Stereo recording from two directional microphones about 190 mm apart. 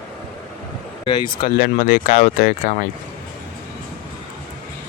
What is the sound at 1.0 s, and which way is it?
Speech, 25° left (ahead or behind).